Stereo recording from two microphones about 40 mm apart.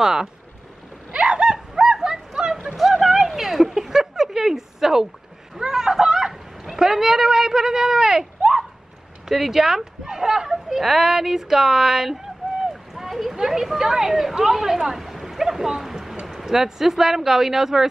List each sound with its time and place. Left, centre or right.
0.0 s speech: centre
1.1 s a sound: right
5.6 s speech: centre
9.3 s speech: centre